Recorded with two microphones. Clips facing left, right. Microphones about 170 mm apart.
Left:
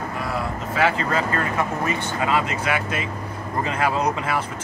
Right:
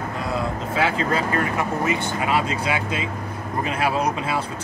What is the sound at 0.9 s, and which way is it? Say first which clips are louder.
Speech: right 1 dB; 15° right (ahead or behind).